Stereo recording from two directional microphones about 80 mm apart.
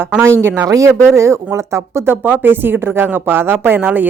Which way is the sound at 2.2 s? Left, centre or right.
Right.